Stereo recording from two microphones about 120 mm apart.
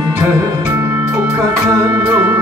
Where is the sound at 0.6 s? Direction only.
20° right (ahead or behind).